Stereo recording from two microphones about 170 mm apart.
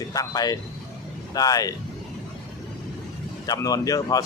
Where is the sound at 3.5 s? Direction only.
20° left (ahead or behind).